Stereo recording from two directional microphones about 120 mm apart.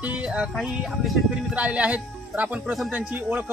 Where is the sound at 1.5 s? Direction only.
10° right (ahead or behind).